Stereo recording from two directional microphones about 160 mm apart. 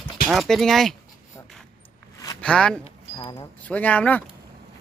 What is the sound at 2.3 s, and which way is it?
Speech, 5° left (ahead or behind).